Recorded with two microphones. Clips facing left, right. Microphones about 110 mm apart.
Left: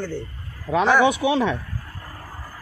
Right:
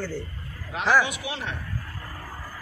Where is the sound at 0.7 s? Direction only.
45° left (ahead or behind).